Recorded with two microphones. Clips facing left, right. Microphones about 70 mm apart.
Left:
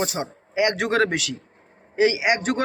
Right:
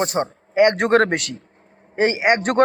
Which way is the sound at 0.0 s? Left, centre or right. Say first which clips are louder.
Right 5 dB; right.